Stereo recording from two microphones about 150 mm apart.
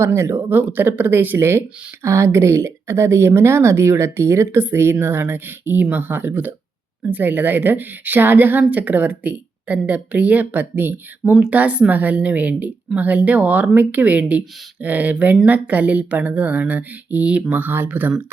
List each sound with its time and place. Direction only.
0.0 s speech: 20° right (ahead or behind)